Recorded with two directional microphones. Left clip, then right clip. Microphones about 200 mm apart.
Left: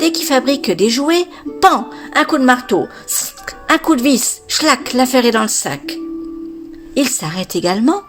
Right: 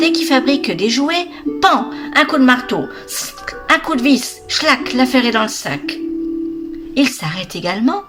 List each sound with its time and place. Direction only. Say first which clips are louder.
0.0 s a woman's voice: right 1 dB; 45° left (ahead or behind)